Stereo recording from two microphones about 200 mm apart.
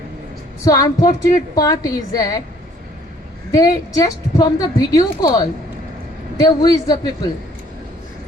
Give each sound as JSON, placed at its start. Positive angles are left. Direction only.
{"t": 0.6, "sound": "a woman's voice", "side_deg": 15}
{"t": 3.5, "sound": "a woman's voice", "side_deg": 15}
{"t": 6.3, "sound": "a man's voice", "side_deg": 20}